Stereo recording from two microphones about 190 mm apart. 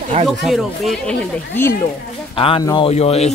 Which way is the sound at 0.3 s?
Centre (ahead or behind).